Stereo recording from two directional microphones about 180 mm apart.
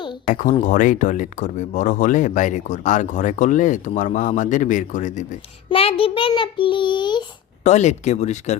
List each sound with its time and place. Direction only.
0.3 s speech: 45° left (ahead or behind)
5.6 s a child's voice: 30° left (ahead or behind)
7.6 s speech: 40° left (ahead or behind)